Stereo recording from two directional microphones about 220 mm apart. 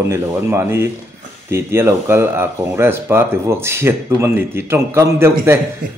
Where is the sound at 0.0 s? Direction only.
10° right (ahead or behind).